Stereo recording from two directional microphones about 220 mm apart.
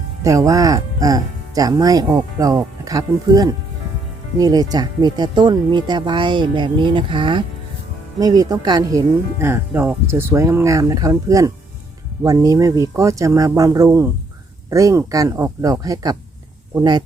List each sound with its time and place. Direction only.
0.2 s speech: 15° right (ahead or behind)